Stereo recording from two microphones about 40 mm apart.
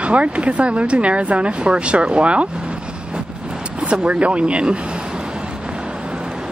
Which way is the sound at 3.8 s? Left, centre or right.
Right.